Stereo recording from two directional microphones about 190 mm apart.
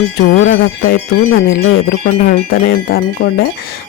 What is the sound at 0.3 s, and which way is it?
Speech, 80° left.